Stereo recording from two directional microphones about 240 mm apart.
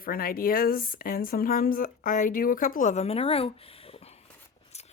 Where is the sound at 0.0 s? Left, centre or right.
Left.